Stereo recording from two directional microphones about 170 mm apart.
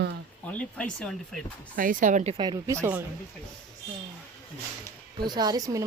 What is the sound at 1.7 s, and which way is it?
Speech, 50° right (ahead or behind).